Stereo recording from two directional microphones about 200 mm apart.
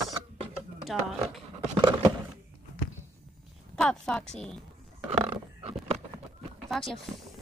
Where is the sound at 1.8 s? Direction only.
20° right (ahead or behind).